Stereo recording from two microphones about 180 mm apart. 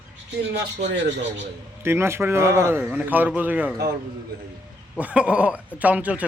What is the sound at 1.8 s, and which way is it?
A man's voice, 15° right (ahead or behind).